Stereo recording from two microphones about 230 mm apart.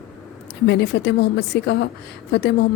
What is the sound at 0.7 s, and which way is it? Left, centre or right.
Speech, left.